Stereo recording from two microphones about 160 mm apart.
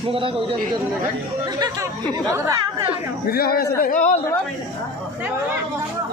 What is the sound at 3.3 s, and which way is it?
Speech, 75° left (ahead or behind).